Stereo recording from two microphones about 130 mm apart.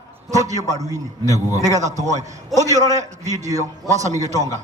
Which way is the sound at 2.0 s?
65° right (ahead or behind).